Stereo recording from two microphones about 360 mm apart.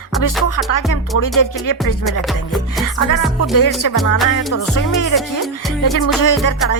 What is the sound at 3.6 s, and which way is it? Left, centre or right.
Music, left.